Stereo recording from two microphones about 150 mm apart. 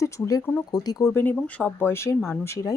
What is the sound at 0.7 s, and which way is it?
Speech, 25° left (ahead or behind).